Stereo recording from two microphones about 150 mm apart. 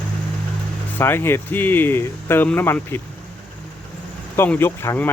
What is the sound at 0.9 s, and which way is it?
Speech, 15° left (ahead or behind).